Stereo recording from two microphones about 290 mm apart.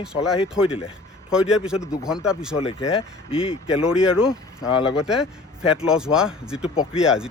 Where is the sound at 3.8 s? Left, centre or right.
Centre.